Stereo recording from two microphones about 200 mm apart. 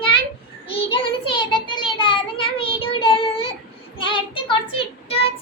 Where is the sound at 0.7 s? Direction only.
25° left (ahead or behind).